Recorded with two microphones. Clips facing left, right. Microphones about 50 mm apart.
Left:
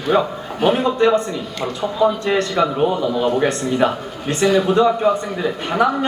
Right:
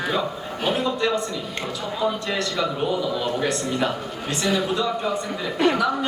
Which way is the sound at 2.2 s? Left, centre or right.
Left.